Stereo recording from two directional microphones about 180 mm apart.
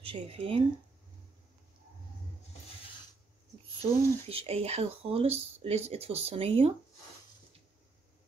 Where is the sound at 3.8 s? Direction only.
35° right (ahead or behind).